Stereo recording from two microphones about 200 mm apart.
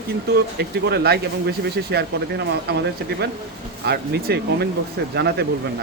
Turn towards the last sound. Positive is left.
turn(degrees=-55)  # may be behind; listen again after turning